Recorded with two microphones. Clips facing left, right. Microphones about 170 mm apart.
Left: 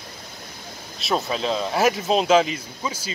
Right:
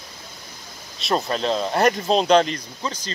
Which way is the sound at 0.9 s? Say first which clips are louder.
Right 1 dB; centre (ahead or behind).